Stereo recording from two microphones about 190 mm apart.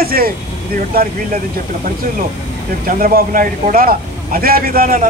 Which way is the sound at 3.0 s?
50° right (ahead or behind).